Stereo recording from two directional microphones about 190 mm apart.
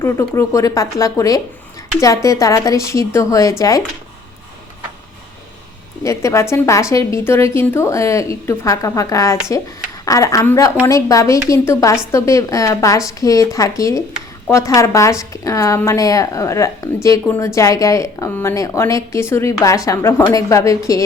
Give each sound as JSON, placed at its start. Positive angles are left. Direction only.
{"t": 0.0, "sound": "a woman's voice", "side_deg": 15}
{"t": 6.0, "sound": "a woman's voice", "side_deg": 15}